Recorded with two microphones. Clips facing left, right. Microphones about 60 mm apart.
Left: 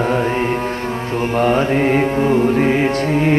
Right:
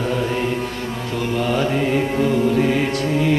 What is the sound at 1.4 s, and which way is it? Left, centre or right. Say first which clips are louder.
Music: left 5 dB; left.